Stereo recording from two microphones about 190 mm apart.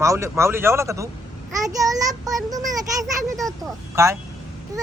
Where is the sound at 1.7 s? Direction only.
20° right (ahead or behind).